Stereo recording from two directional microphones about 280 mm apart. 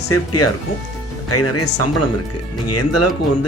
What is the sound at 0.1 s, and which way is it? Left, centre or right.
A man's voice, left.